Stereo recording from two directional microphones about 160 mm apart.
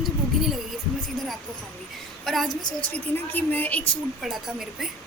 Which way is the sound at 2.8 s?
10° left (ahead or behind).